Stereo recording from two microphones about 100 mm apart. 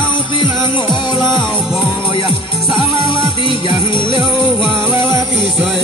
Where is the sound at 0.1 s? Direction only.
55° left (ahead or behind).